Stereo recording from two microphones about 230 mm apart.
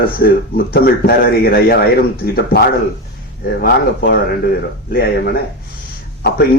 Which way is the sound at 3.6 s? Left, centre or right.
Left.